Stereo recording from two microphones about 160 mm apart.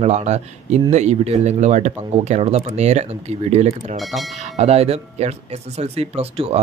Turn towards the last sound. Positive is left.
turn(degrees=-40)  # may be behind; listen again after turning